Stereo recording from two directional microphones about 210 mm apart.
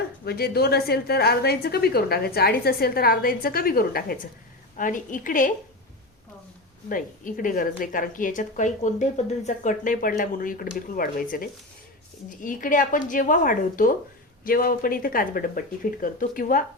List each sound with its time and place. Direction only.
0.3 s a woman's voice: 50° left (ahead or behind)
6.8 s a woman's voice: 40° left (ahead or behind)